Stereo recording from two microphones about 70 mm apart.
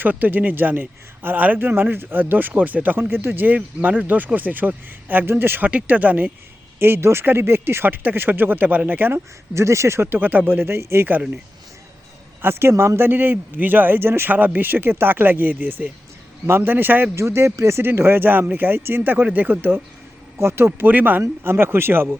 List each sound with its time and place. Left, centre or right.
0.0 s speech: right
5.6 s speech: right
6.7 s speech: right
12.4 s speech: right
17.2 s speech: right